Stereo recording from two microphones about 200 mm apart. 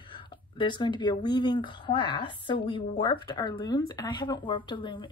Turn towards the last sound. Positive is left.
turn(degrees=25)  # may be behind; listen again after turning